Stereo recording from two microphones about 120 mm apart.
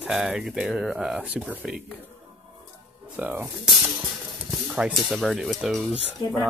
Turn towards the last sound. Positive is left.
turn(degrees=0)  # may be behind; listen again after turning